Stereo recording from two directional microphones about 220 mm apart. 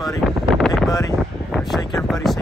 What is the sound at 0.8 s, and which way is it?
Speech, 15° left (ahead or behind).